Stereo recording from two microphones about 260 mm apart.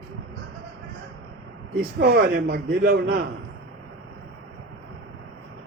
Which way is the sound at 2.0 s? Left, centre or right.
Right.